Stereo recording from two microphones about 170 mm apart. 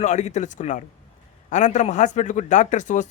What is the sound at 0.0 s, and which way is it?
Speech, 45° left (ahead or behind).